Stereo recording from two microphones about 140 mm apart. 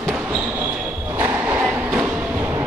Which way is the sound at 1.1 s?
15° right (ahead or behind).